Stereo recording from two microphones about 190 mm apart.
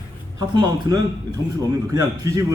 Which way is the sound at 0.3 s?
20° right (ahead or behind).